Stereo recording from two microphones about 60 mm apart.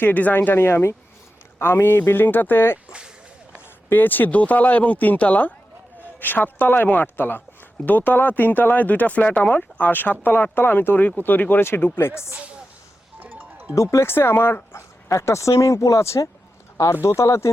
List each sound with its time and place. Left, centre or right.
0.0 s speech: left
3.9 s speech: left
13.1 s music: right
13.7 s speech: left